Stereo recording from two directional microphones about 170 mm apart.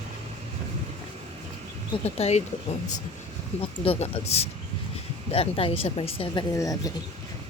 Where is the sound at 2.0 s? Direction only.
40° left (ahead or behind).